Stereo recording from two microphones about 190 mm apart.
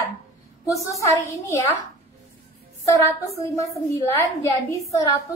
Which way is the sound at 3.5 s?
15° left (ahead or behind).